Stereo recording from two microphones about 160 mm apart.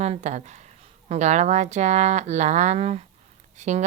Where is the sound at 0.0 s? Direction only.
45° right (ahead or behind).